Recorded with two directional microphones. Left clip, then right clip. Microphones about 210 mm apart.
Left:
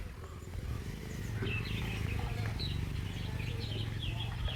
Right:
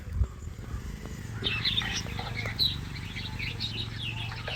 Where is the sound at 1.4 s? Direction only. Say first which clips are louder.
Right 12 dB; 45° right (ahead or behind).